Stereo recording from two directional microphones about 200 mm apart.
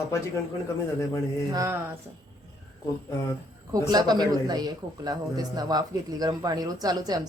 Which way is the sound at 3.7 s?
20° right (ahead or behind).